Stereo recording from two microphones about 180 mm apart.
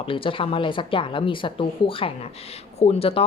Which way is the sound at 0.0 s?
30° left (ahead or behind).